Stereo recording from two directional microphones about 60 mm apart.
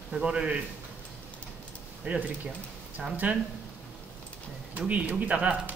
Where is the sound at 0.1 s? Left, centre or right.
Centre.